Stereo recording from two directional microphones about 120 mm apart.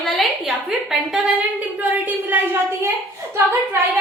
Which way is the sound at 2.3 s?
15° right (ahead or behind).